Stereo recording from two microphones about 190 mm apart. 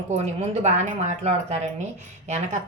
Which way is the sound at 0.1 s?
35° right (ahead or behind).